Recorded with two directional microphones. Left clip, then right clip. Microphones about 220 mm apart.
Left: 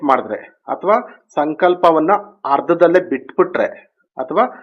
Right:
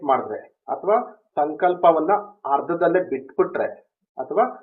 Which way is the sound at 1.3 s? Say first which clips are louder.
Left 5 dB; 35° left (ahead or behind).